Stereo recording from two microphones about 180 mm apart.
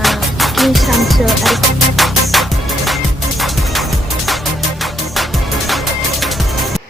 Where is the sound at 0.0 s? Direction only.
Centre (ahead or behind).